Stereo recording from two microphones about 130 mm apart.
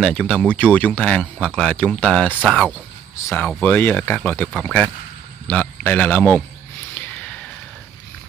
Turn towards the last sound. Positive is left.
turn(degrees=10)  # may be behind; listen again after turning